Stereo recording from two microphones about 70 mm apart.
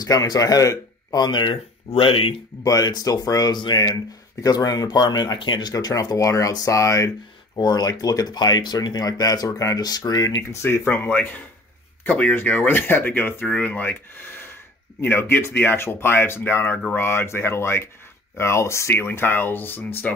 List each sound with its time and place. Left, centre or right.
0.0 s speech: left
2.6 s speech: left
7.5 s speech: left
9.5 s speech: left
9.8 s speech: left
10.5 s speech: left
13.5 s speech: centre